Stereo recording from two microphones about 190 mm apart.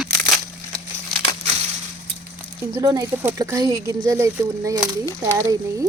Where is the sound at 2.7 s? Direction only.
20° right (ahead or behind).